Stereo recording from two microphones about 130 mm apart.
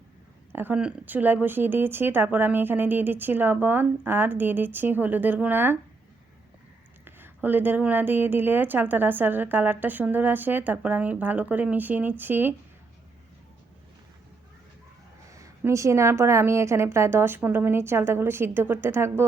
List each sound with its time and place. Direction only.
0.5 s a woman's voice: 15° right (ahead or behind)
7.0 s a woman's voice: 15° right (ahead or behind)
15.3 s a woman's voice: 25° right (ahead or behind)